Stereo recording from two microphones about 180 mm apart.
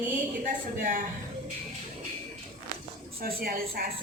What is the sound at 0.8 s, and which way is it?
Speech, 50° right (ahead or behind).